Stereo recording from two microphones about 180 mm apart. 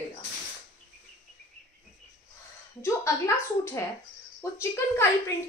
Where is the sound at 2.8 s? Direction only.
15° left (ahead or behind).